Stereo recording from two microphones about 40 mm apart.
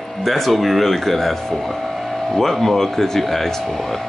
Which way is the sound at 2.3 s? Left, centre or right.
Centre.